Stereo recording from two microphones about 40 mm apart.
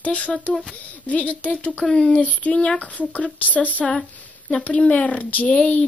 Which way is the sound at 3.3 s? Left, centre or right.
Left.